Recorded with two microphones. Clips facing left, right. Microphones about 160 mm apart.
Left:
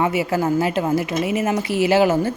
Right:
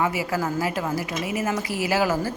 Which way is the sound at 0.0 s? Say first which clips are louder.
Left 5 dB; 25° left (ahead or behind).